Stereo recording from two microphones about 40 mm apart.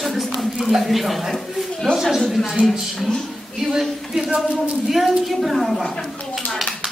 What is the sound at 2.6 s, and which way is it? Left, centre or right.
Speech, right.